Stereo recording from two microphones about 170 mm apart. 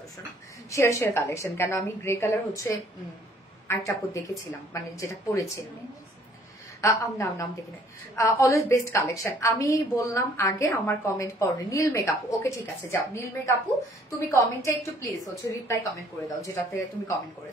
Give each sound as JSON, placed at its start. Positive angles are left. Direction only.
{"t": 0.7, "sound": "a woman's voice", "side_deg": 15}
{"t": 6.8, "sound": "a woman's voice", "side_deg": 15}